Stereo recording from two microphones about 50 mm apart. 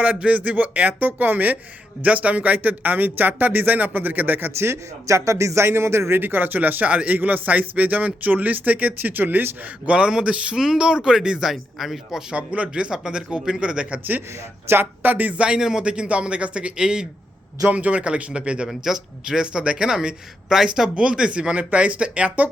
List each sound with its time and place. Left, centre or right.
0.0 s speech: right
4.5 s a man's voice: right
10.1 s speech: centre
11.5 s a man's voice: centre
12.3 s a man's voice: right
14.8 s speech: right
15.4 s a man's voice: centre
17.7 s a man's voice: right
18.7 s a man's voice: centre; by 22.4 s right